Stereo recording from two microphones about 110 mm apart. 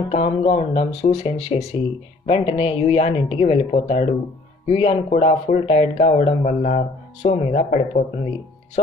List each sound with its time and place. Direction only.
0.1 s speech: 75° left (ahead or behind); by 8.0 s 90° left